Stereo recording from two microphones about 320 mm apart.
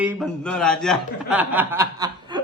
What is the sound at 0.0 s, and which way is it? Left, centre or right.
Speech, centre.